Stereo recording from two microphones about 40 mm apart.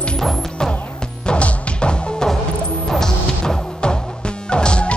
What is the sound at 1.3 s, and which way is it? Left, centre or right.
Music, left.